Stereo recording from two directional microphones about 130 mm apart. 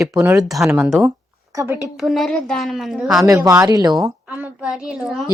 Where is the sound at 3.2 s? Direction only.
25° right (ahead or behind).